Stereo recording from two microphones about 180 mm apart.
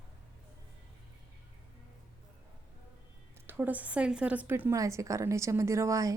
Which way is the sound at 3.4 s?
10° right (ahead or behind).